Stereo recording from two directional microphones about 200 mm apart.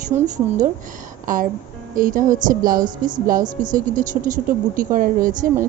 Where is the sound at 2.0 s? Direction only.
45° right (ahead or behind).